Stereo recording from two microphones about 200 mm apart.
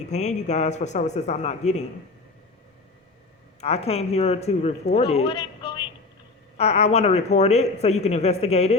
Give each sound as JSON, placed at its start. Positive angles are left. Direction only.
{"t": 0.1, "sound": "speech", "side_deg": 35}
{"t": 3.6, "sound": "a man's voice", "side_deg": 30}